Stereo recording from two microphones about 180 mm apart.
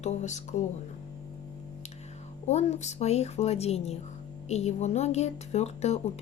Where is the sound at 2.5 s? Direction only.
40° left (ahead or behind).